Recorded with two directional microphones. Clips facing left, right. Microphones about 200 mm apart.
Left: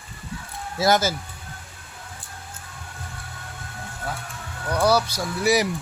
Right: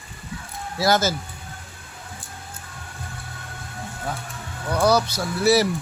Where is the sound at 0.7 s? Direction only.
20° left (ahead or behind).